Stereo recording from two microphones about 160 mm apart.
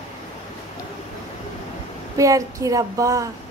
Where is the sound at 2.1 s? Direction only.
20° right (ahead or behind).